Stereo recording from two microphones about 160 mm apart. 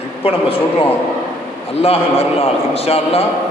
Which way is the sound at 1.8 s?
40° left (ahead or behind).